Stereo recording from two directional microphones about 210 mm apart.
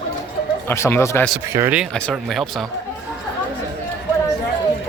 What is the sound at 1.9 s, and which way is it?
Speech, 5° left (ahead or behind).